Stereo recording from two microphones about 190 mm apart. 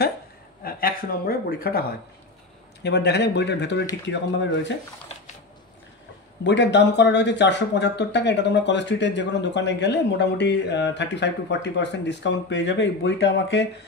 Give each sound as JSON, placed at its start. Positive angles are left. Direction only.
{"t": 0.7, "sound": "speech", "side_deg": 50}
{"t": 6.4, "sound": "speech", "side_deg": 65}